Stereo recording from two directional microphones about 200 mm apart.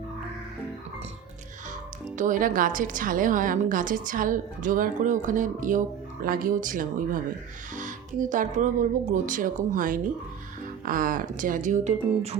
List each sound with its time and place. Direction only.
2.1 s a woman's voice: 40° right (ahead or behind)